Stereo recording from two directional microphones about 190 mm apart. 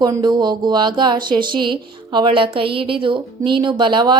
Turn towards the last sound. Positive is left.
turn(degrees=-25)  # may be behind; listen again after turning